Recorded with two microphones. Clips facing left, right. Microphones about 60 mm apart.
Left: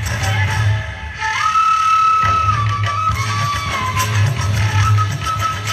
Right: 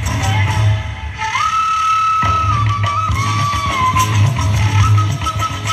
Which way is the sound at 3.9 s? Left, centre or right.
Right.